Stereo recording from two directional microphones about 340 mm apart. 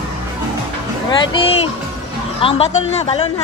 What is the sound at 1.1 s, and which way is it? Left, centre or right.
Speech, centre.